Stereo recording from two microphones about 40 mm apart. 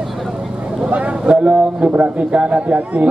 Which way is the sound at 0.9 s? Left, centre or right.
Right.